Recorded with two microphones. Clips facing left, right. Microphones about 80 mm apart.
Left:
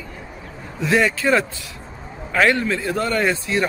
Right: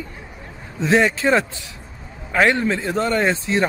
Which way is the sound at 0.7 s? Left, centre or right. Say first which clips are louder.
Right 2 dB; right.